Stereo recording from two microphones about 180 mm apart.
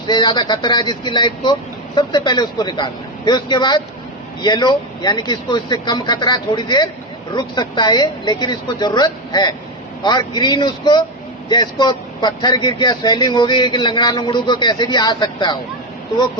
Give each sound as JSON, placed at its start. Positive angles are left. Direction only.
{"t": 0.1, "sound": "a man's voice", "side_deg": 25}